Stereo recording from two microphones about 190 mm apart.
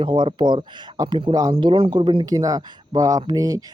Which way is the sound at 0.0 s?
25° right (ahead or behind).